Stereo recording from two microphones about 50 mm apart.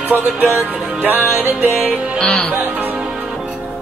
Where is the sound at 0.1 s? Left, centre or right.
Right.